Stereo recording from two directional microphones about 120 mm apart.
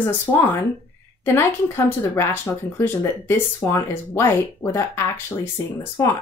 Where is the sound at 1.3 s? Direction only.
20° left (ahead or behind).